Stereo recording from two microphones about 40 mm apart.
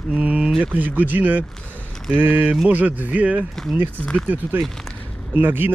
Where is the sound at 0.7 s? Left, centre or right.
Right.